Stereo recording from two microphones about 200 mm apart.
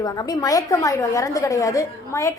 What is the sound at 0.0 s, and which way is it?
A woman's voice, 20° left (ahead or behind).